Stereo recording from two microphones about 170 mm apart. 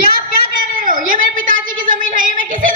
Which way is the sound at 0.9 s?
50° right (ahead or behind).